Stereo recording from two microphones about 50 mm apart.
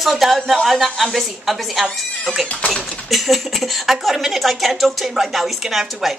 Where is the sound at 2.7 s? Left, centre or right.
Centre.